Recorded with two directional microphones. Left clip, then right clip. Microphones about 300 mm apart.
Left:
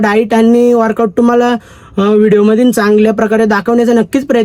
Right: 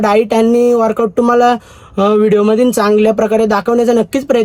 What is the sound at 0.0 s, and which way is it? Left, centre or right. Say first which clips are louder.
Speech: left 1 dB; centre.